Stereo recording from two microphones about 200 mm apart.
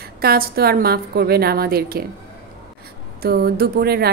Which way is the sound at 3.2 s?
50° right (ahead or behind).